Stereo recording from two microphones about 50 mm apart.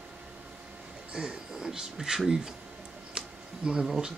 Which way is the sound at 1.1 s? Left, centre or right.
Centre.